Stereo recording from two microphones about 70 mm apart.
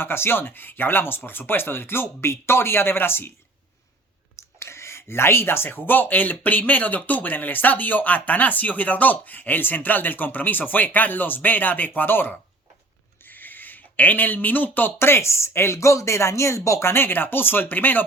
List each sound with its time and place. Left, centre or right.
0.0 s speech: left
4.4 s speech: left
16.9 s speech: left